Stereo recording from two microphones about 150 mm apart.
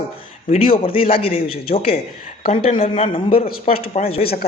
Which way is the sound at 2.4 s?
55° left (ahead or behind).